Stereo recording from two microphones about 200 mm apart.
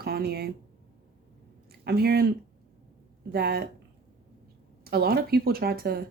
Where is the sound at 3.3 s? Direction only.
50° right (ahead or behind).